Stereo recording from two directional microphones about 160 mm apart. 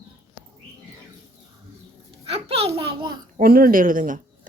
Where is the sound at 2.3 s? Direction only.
40° right (ahead or behind).